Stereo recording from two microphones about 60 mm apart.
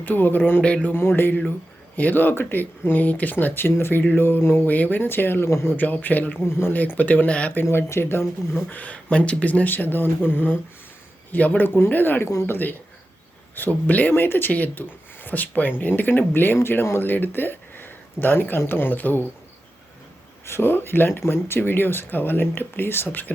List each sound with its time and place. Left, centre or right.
0.0 s speech: left
0.6 s speech: left
0.9 s speech: left
5.5 s speech: left
5.7 s speech: left
6.4 s speech: left
6.7 s speech: left
7.5 s speech: left
8.7 s speech: left
20.5 s speech: left